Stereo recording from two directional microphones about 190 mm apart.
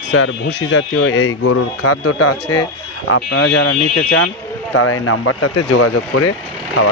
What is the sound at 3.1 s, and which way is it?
Speech, 90° left.